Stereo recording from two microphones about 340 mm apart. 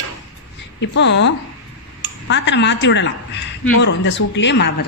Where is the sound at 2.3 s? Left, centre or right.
Left.